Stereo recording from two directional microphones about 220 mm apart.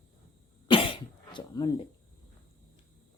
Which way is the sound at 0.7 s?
25° left (ahead or behind).